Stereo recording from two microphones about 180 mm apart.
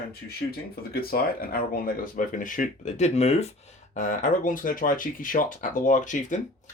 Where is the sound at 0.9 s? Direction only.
55° left (ahead or behind).